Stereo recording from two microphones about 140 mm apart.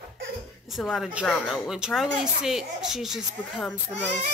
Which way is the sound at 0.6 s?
Centre (ahead or behind).